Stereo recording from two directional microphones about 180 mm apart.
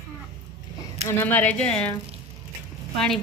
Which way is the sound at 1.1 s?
10° left (ahead or behind).